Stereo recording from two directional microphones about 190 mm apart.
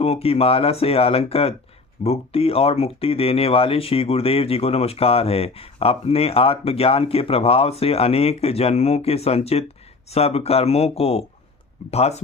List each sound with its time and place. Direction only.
0.0 s speech: 30° left (ahead or behind)